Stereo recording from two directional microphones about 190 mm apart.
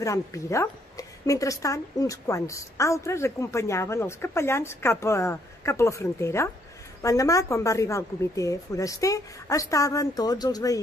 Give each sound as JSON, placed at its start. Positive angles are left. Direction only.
{"t": 0.0, "sound": "a woman's voice", "side_deg": 15}